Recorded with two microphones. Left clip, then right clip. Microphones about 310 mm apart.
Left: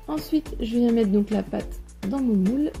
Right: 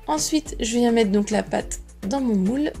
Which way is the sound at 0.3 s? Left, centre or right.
Right.